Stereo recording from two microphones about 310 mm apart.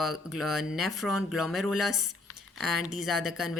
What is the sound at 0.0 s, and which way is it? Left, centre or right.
Speech, centre.